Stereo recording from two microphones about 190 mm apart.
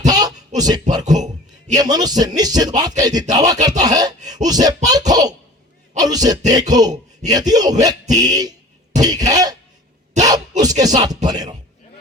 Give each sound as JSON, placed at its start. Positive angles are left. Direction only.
{"t": 0.1, "sound": "a sound", "side_deg": -20}
{"t": 0.6, "sound": "speech", "side_deg": -20}
{"t": 9.0, "sound": "cough", "side_deg": -20}
{"t": 10.2, "sound": "speech", "side_deg": -20}